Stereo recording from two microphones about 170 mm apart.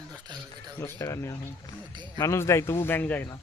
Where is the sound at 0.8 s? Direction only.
15° left (ahead or behind).